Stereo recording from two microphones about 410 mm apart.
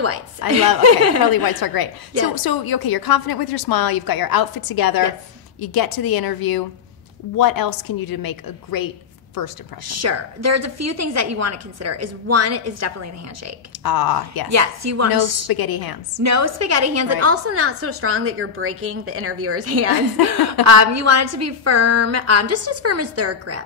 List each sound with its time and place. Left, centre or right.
0.4 s a woman's voice: left
0.8 s a woman's voice: right
1.3 s a woman's voice: left
9.8 s a woman's voice: right
13.8 s a woman's voice: left
14.5 s a woman's voice: right
15.4 s a woman's voice: left
16.2 s a woman's voice: right